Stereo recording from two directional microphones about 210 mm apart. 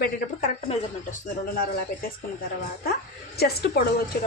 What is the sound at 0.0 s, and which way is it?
A woman's voice, 35° left (ahead or behind).